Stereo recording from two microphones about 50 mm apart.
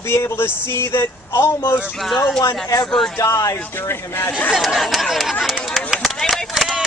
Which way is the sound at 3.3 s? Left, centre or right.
Left.